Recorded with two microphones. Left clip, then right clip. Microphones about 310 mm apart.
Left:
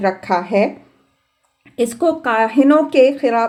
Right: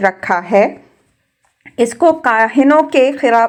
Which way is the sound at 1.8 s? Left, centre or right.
Centre.